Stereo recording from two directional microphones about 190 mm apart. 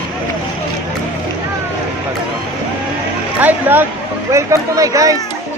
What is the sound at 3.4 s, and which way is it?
Speech, 10° right (ahead or behind).